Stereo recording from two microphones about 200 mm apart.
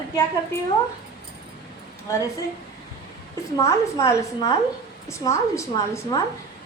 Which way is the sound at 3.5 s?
15° left (ahead or behind).